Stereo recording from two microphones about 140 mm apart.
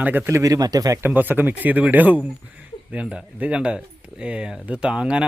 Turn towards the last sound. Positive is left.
turn(degrees=-5)  # may be behind; listen again after turning